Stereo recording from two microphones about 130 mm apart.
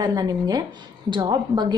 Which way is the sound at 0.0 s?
30° right (ahead or behind).